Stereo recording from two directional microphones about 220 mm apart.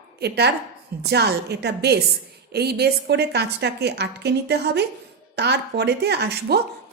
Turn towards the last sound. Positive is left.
turn(degrees=-50)  # may be behind; listen again after turning